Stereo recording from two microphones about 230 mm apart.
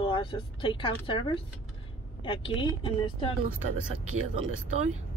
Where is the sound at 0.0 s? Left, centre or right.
Left.